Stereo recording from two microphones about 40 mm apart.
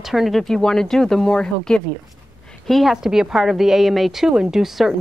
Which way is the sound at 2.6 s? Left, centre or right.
Centre.